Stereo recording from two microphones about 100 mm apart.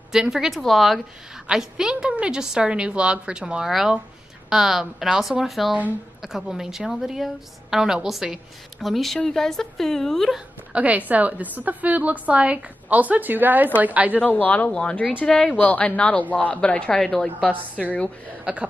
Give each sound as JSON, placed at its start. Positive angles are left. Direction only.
{"t": 0.1, "sound": "a woman's voice", "side_deg": -5}
{"t": 10.7, "sound": "a woman's voice", "side_deg": -15}
{"t": 14.2, "sound": "speech", "side_deg": 15}
{"t": 17.8, "sound": "a woman's voice", "side_deg": -10}